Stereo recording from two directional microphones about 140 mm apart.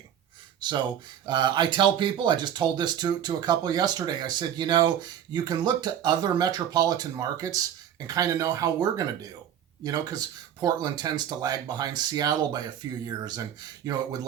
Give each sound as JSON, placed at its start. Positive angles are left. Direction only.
{"t": 0.6, "sound": "speech", "side_deg": -30}